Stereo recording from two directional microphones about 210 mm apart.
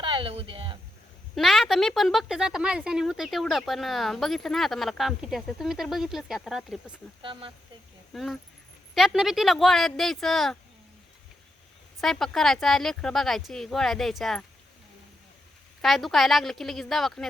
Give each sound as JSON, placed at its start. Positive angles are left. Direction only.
{"t": 0.0, "sound": "speech", "side_deg": -25}
{"t": 1.4, "sound": "a woman's voice", "side_deg": 0}
{"t": 7.2, "sound": "speech", "side_deg": -25}
{"t": 8.1, "sound": "a woman's voice", "side_deg": 0}
{"t": 11.9, "sound": "a woman's voice", "side_deg": 0}
{"t": 15.8, "sound": "a woman's voice", "side_deg": 0}